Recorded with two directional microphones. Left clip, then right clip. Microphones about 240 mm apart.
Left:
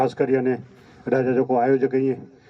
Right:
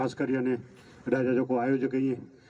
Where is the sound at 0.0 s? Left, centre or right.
Centre.